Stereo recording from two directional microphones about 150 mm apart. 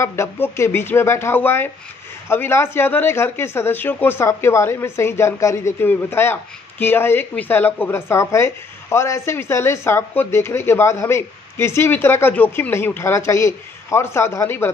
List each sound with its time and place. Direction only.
0.0 s speech: 15° left (ahead or behind)